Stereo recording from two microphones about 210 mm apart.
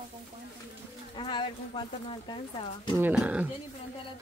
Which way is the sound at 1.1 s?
20° left (ahead or behind).